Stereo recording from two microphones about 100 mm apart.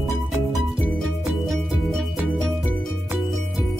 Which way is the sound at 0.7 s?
15° left (ahead or behind).